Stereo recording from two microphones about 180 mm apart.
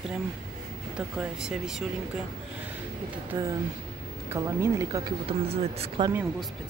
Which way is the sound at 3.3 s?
15° right (ahead or behind).